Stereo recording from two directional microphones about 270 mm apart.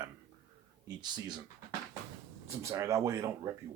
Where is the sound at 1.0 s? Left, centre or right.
Centre.